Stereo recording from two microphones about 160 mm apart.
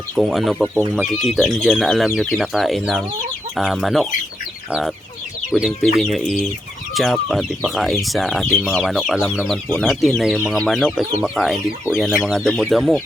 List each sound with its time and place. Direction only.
0.2 s speech: centre (ahead or behind)
5.5 s speech: 5° right (ahead or behind)